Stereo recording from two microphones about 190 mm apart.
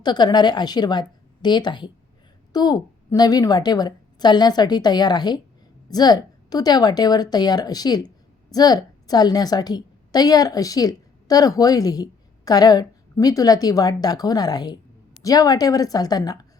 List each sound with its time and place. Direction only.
0.0 s a woman's voice: 20° left (ahead or behind)